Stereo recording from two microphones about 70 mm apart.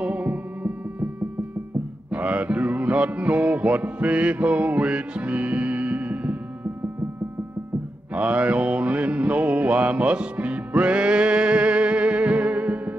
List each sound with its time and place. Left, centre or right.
0.0 s music: centre
2.0 s music: centre
8.1 s mantra: centre